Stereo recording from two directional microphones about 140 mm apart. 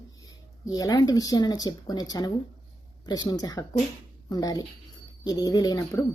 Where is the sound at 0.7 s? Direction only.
30° left (ahead or behind).